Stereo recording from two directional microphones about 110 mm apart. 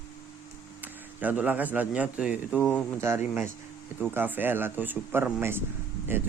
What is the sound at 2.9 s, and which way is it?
Speech, 25° right (ahead or behind).